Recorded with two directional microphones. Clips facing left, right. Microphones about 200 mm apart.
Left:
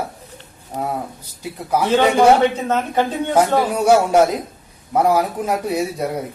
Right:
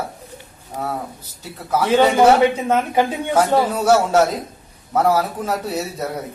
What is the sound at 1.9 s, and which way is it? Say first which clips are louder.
A woman's voice: even; 10° right (ahead or behind).